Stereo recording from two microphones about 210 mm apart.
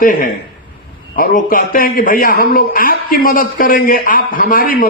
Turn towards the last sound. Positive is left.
turn(degrees=45)  # may be behind; listen again after turning